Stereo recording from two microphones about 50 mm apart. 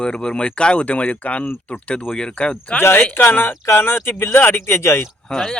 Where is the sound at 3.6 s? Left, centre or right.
Left.